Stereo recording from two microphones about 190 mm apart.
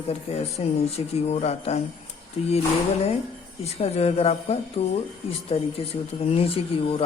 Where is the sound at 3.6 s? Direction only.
35° left (ahead or behind).